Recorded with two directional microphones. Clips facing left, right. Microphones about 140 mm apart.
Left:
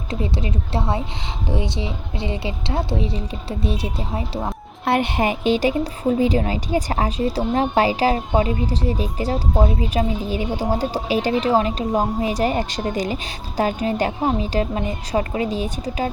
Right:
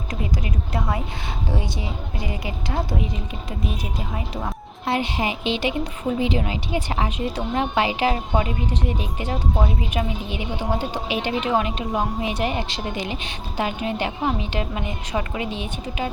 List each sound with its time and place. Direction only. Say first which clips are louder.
0.1 s a woman's voice: left 4 dB; 30° left (ahead or behind)
4.9 s a woman's voice: left 4 dB; 55° left (ahead or behind); by 16.1 s 40° left (ahead or behind)